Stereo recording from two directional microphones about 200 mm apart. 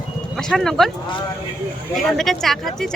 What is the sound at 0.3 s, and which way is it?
Speech, 5° left (ahead or behind).